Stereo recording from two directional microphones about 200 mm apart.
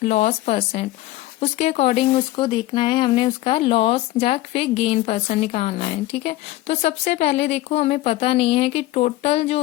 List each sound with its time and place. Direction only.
0.0 s speech: 30° left (ahead or behind)